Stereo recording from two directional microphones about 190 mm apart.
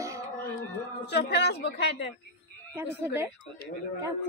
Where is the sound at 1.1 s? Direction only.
60° left (ahead or behind).